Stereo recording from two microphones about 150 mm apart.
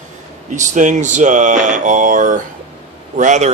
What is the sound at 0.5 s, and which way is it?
Speech, 55° right (ahead or behind).